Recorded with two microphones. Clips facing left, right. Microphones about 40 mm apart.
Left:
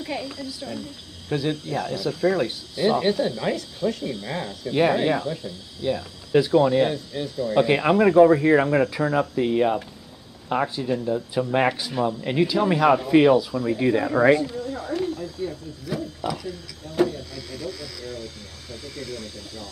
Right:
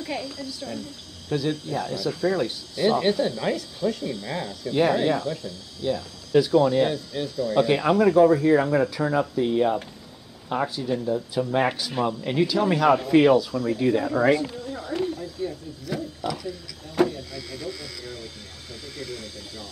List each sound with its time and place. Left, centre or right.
0.0 s a woman's voice: centre
2.8 s speech: centre
3.3 s speech: centre
6.8 s speech: centre; by 9.0 s left
9.0 s speech: centre
9.3 s speech: left
11.9 s speech: centre
12.3 s speech: centre
13.7 s speech: left
17.5 s speech: centre